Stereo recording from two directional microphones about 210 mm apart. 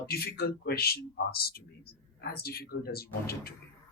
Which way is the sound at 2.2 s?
50° left (ahead or behind).